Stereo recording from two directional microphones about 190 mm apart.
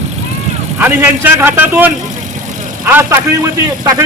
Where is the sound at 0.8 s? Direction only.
10° right (ahead or behind).